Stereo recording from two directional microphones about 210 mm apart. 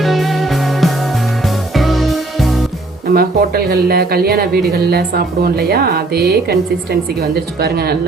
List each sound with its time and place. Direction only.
0.0 s music: centre (ahead or behind)
3.1 s speech: 45° right (ahead or behind)